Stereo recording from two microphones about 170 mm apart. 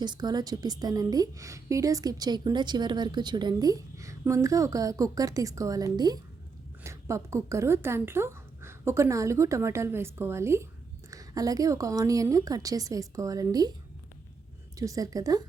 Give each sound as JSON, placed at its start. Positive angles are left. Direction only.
{"t": 0.0, "sound": "a woman's voice", "side_deg": -25}
{"t": 14.8, "sound": "a woman's voice", "side_deg": -20}